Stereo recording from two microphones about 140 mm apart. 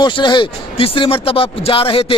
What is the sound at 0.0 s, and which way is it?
Speech, 35° left (ahead or behind).